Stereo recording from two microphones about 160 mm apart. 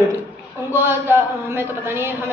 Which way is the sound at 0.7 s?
15° right (ahead or behind).